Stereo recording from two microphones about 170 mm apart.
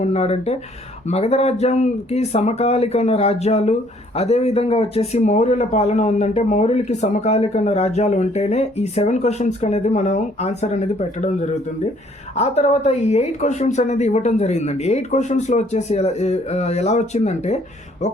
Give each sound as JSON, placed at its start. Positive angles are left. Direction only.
{"t": 0.0, "sound": "speech", "side_deg": 40}
{"t": 12.4, "sound": "speech", "side_deg": 40}